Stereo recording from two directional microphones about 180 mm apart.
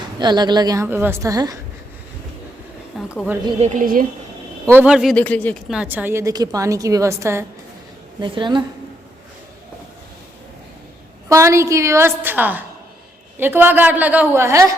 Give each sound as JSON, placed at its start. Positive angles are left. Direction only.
{"t": 0.2, "sound": "a woman's voice", "side_deg": -25}
{"t": 2.9, "sound": "a sound", "side_deg": 0}
{"t": 3.6, "sound": "a woman's voice", "side_deg": -45}
{"t": 4.6, "sound": "speech", "side_deg": -10}
{"t": 5.7, "sound": "a woman's voice", "side_deg": -10}
{"t": 8.2, "sound": "a woman's voice", "side_deg": -25}
{"t": 11.3, "sound": "a woman's voice", "side_deg": -15}